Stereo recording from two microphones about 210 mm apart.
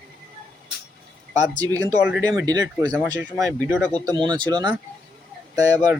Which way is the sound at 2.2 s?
15° right (ahead or behind).